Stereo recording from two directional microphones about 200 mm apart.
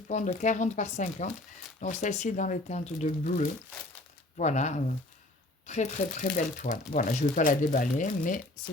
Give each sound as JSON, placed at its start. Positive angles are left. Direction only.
{"t": 0.1, "sound": "speech", "side_deg": 35}